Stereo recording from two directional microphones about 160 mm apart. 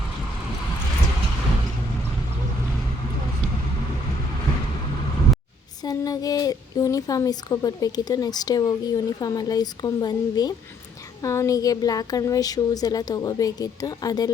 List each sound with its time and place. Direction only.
5.8 s speech: 25° left (ahead or behind)